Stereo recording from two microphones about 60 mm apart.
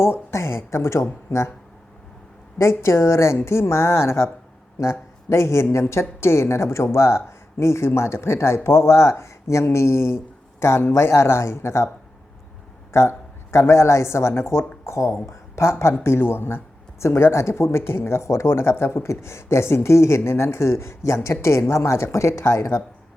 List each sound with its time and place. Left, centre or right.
0.0 s speech: left
2.6 s speech: left
12.9 s speech: left
15.3 s a sound: left
16.0 s speech: left